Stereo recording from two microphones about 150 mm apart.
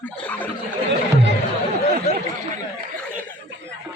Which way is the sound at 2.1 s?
50° left (ahead or behind).